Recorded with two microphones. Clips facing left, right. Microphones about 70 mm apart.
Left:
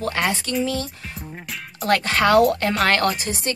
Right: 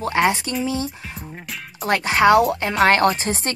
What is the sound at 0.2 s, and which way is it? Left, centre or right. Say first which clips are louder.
Speech: right 6 dB; right.